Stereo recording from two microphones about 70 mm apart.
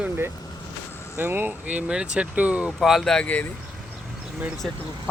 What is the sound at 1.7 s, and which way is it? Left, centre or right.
Speech, centre.